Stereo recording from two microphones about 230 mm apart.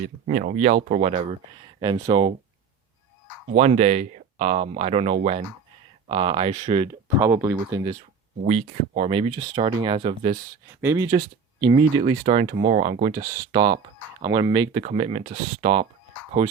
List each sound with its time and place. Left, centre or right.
0.3 s speech: right
3.5 s speech: right
7.2 s speech: centre
8.4 s speech: right
10.8 s speech: centre
14.8 s speech: right